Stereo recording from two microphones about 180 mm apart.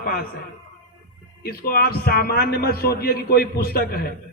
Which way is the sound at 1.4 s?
55° left (ahead or behind).